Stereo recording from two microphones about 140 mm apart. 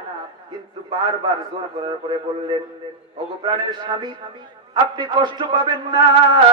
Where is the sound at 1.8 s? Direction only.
35° right (ahead or behind).